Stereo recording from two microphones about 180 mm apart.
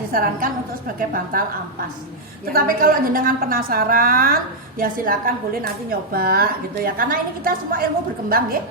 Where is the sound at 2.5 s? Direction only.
55° right (ahead or behind).